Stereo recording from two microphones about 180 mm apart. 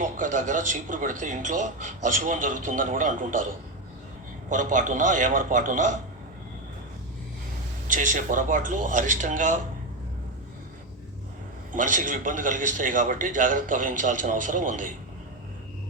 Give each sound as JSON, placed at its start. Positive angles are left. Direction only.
{"t": 0.0, "sound": "speech", "side_deg": -45}
{"t": 4.4, "sound": "speech", "side_deg": -45}
{"t": 7.9, "sound": "speech", "side_deg": -45}
{"t": 11.7, "sound": "speech", "side_deg": -45}